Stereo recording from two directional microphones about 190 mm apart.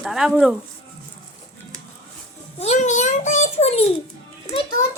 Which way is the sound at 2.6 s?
35° left (ahead or behind).